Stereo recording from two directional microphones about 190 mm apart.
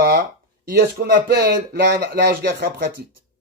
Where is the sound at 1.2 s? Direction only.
55° right (ahead or behind).